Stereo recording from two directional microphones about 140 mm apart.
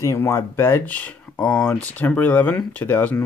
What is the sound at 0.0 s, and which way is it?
Speech, 20° left (ahead or behind).